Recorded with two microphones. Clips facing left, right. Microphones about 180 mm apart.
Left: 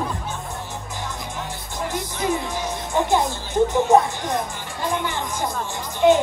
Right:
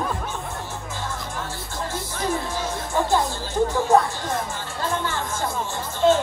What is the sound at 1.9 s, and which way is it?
Music, 15° left (ahead or behind).